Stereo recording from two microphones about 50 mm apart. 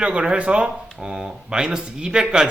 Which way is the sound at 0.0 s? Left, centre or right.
Right.